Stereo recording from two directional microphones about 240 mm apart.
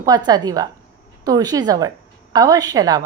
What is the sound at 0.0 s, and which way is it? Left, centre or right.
A woman's voice, centre.